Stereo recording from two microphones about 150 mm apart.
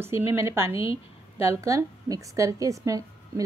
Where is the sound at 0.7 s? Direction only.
40° left (ahead or behind).